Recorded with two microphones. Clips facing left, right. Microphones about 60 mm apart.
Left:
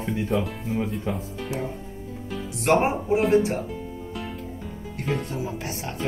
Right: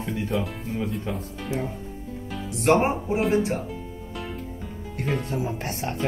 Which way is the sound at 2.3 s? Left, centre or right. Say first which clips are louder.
Right 1 dB; centre.